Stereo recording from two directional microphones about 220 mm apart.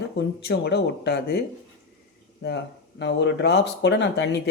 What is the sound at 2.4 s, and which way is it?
Speech, 50° left (ahead or behind).